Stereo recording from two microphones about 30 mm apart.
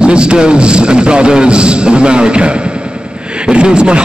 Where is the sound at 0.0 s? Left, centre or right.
Right.